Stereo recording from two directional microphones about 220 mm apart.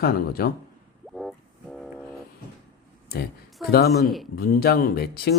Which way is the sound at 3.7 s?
45° left (ahead or behind).